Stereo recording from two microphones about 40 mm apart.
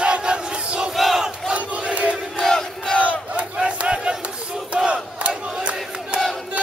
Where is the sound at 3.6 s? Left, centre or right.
Right.